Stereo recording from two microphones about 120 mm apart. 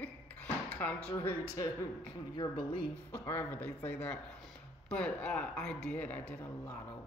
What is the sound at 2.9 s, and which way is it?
Speech, 15° left (ahead or behind).